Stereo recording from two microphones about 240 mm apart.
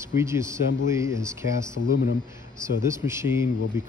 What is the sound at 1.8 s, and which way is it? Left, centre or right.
Speech, left.